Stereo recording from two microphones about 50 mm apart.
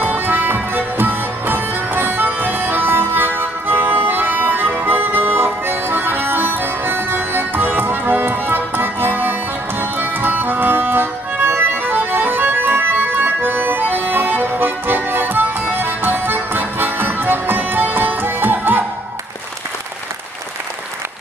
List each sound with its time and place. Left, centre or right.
0.0 s music: right